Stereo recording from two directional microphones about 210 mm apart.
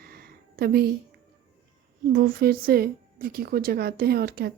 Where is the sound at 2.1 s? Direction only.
45° right (ahead or behind).